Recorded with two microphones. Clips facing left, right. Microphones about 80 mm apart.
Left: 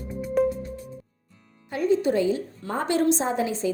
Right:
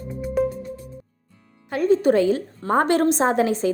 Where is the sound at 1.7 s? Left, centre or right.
Right.